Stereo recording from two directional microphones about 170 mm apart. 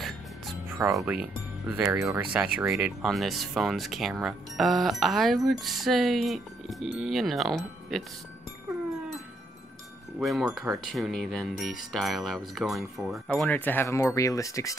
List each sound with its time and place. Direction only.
0.8 s speech: 5° right (ahead or behind)
1.8 s speech: 20° right (ahead or behind)
2.7 s speech: centre (ahead or behind)
10.2 s speech: centre (ahead or behind); by 14.8 s 20° left (ahead or behind)